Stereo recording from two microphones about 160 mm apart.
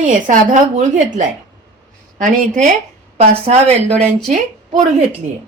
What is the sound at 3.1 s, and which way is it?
Speech, 40° right (ahead or behind).